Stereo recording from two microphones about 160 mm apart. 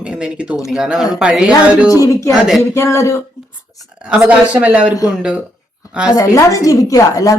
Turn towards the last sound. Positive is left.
turn(degrees=20)  # may be behind; listen again after turning